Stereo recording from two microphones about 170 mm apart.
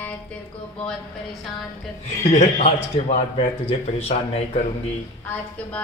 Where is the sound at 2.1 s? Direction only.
40° left (ahead or behind).